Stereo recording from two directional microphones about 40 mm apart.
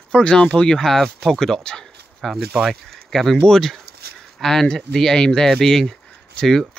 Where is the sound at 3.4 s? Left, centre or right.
Centre.